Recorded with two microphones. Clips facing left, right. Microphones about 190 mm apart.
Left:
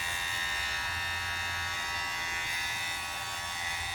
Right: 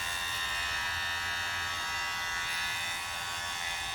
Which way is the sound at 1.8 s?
10° left (ahead or behind).